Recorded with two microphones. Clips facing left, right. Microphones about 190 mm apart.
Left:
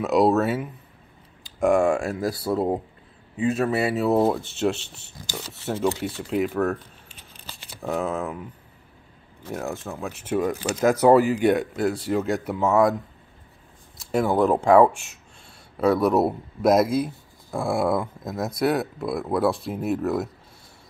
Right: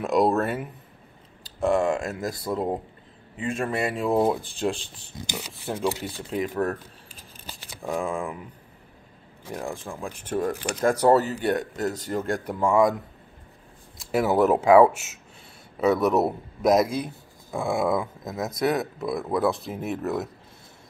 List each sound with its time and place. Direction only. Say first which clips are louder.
0.0 s speech: left 2 dB; 5° left (ahead or behind)
5.1 s speech: right 1 dB; 20° right (ahead or behind)
5.7 s speech: left 3 dB; centre (ahead or behind)
9.5 s speech: left 2 dB; 5° left (ahead or behind)
13.9 s speech: even; 5° right (ahead or behind)